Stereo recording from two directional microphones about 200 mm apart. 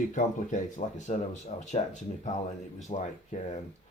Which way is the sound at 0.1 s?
40° left (ahead or behind).